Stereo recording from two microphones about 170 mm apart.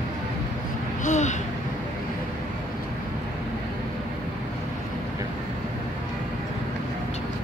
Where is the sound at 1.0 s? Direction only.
45° left (ahead or behind).